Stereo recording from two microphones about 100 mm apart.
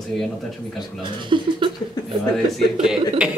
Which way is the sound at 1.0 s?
55° right (ahead or behind).